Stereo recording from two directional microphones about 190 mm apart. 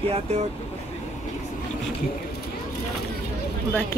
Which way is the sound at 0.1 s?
35° right (ahead or behind).